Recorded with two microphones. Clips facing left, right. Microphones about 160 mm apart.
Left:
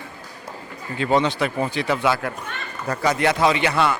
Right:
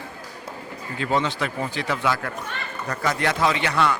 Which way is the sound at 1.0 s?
20° left (ahead or behind).